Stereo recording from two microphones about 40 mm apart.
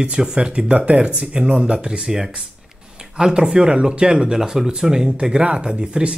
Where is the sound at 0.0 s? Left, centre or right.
Right.